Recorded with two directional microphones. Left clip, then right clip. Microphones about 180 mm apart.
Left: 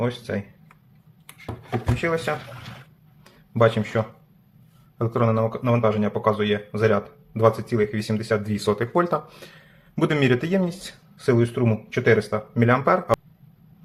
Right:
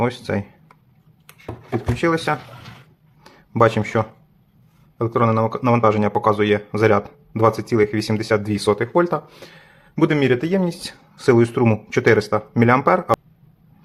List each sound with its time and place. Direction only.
0.0 s speech: 40° right (ahead or behind)
2.0 s speech: 35° right (ahead or behind)
3.2 s a sound: 30° right (ahead or behind)
4.9 s speech: 20° right (ahead or behind)
11.3 s speech: 35° right (ahead or behind)